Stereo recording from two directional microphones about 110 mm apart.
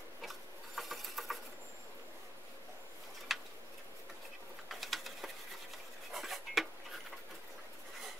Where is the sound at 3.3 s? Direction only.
Centre (ahead or behind).